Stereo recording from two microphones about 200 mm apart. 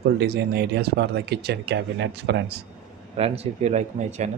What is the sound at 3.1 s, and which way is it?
Speech, 30° right (ahead or behind).